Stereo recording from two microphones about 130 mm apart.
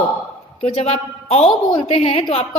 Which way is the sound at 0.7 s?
55° left (ahead or behind).